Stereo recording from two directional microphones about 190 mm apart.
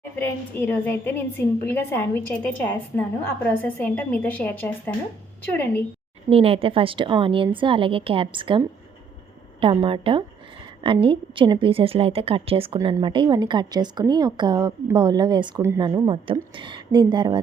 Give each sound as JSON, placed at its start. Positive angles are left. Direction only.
{"t": 0.2, "sound": "a woman's voice", "side_deg": 10}
{"t": 6.3, "sound": "a woman's voice", "side_deg": -30}